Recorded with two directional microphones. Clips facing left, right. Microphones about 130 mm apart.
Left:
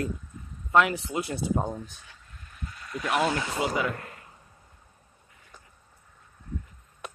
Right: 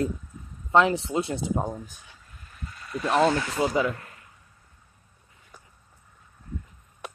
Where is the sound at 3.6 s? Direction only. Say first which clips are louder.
Right 4 dB; 30° right (ahead or behind).